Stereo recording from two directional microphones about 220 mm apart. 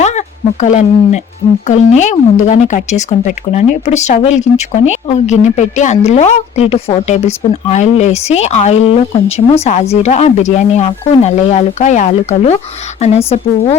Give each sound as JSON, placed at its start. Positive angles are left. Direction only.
{"t": 0.0, "sound": "speech", "side_deg": 30}